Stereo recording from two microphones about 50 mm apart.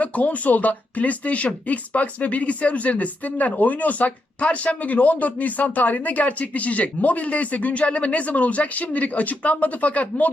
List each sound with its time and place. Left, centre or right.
0.0 s speech: left